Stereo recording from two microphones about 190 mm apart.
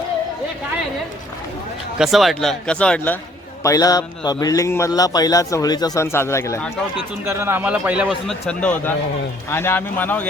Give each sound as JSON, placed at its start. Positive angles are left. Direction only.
{"t": 2.0, "sound": "speech", "side_deg": 0}
{"t": 3.6, "sound": "a man's voice", "side_deg": 15}
{"t": 7.3, "sound": "a man's voice", "side_deg": -10}
{"t": 8.4, "sound": "speech", "side_deg": 10}